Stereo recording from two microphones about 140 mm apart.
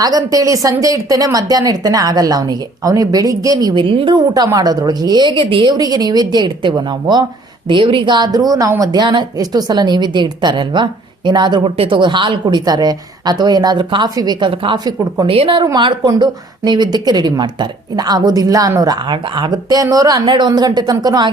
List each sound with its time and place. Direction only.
0.0 s a woman's voice: 25° right (ahead or behind)